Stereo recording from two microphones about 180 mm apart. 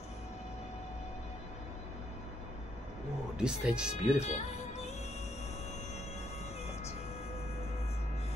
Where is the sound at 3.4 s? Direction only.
5° right (ahead or behind).